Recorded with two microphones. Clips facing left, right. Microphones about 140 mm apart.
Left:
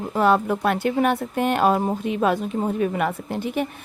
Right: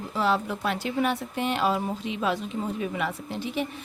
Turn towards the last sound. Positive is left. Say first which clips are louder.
# left 5 dB
turn(degrees=50)  # may be behind; listen again after turning